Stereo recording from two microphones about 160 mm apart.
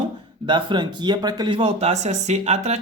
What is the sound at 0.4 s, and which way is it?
Speech, 30° right (ahead or behind).